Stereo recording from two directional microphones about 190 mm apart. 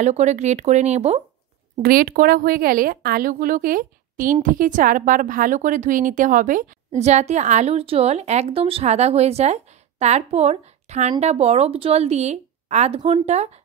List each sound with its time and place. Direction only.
0.0 s a woman's voice: 35° right (ahead or behind)
1.8 s a woman's voice: 50° right (ahead or behind); by 13.5 s 35° right (ahead or behind)